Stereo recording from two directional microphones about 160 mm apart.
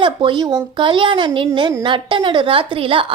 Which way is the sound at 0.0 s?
30° right (ahead or behind).